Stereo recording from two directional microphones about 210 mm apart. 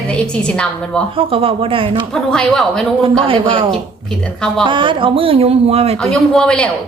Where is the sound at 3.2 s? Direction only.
25° right (ahead or behind).